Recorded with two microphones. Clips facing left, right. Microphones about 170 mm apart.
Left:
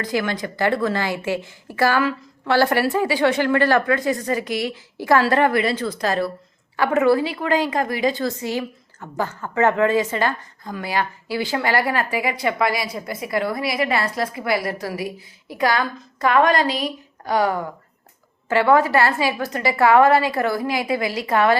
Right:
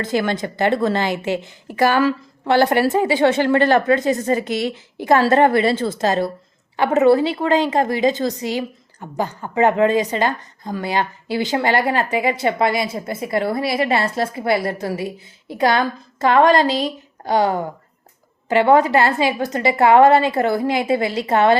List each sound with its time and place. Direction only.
0.0 s a woman's voice: 25° right (ahead or behind)
2.0 s a woman's voice: 35° right (ahead or behind)
2.5 s a woman's voice: 20° right (ahead or behind)